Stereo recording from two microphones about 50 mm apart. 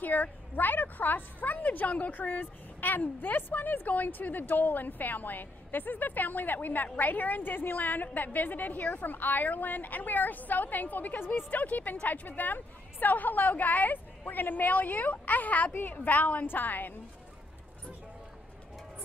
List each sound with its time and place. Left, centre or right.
0.0 s a woman's voice: left
11.5 s a woman's voice: left